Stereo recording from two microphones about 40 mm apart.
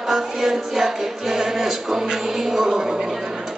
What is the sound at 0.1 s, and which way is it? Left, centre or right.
Music, centre.